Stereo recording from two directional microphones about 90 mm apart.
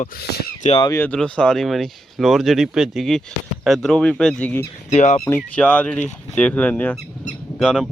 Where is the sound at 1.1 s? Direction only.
10° left (ahead or behind).